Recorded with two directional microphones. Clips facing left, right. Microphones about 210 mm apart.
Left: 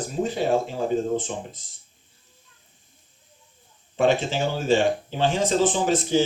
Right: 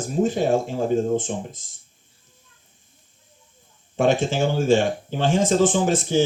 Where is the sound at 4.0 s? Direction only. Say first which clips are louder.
Right 2 dB; 50° right (ahead or behind).